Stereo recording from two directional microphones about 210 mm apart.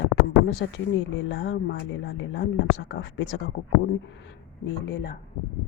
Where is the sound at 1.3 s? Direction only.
55° left (ahead or behind).